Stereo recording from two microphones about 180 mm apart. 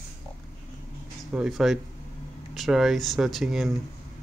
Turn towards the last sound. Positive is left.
turn(degrees=0)  # may be behind; listen again after turning